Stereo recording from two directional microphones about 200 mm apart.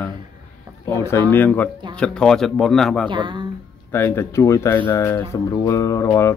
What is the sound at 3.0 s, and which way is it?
Speech, 25° right (ahead or behind).